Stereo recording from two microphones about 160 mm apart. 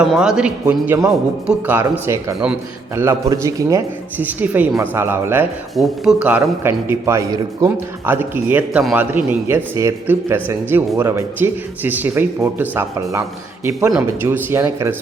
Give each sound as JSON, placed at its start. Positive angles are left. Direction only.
{"t": 0.0, "sound": "a man's voice", "side_deg": -5}
{"t": 4.2, "sound": "a man's voice", "side_deg": -10}
{"t": 5.7, "sound": "a man's voice", "side_deg": 0}